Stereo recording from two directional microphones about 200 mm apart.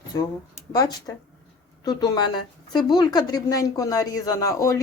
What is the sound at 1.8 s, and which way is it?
A woman's voice, 20° left (ahead or behind).